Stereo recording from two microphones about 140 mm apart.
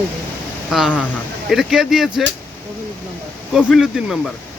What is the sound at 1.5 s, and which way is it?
Speech, centre (ahead or behind).